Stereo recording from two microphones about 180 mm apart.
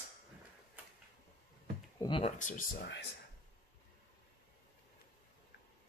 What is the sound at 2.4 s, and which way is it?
Speech, 45° left (ahead or behind).